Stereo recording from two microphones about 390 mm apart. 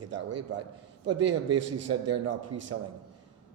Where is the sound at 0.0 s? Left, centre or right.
Right.